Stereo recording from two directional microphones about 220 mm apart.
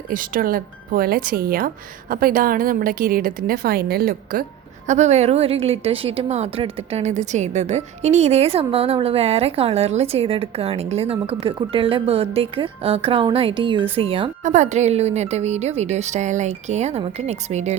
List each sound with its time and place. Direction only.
0.1 s a woman's voice: 40° right (ahead or behind)